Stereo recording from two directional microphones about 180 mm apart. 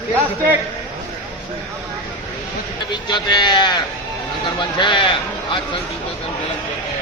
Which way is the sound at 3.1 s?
25° left (ahead or behind).